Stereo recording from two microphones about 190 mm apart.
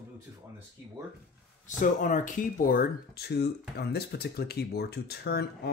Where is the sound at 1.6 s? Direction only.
40° left (ahead or behind).